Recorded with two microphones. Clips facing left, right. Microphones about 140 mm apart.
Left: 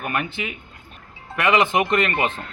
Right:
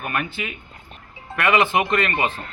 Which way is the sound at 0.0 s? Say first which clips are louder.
Left 1 dB; 20° left (ahead or behind).